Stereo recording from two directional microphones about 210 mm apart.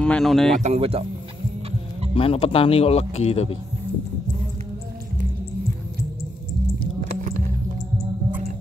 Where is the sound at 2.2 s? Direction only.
25° left (ahead or behind).